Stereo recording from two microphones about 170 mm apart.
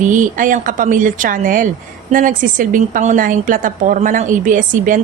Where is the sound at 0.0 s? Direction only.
50° right (ahead or behind).